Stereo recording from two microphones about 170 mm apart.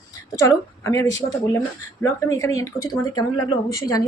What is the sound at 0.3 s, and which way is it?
Speech, 15° left (ahead or behind).